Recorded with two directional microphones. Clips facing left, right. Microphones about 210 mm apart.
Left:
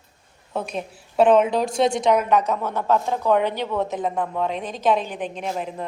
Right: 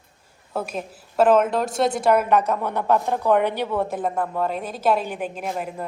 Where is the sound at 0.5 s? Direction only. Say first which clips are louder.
Even; 5° right (ahead or behind).